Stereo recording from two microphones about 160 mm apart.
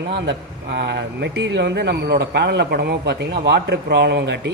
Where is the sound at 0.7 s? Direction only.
90° right.